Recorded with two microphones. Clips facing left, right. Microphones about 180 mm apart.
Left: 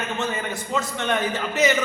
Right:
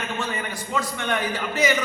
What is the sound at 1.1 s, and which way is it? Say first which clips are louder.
Speech: left 3 dB; 20° left (ahead or behind).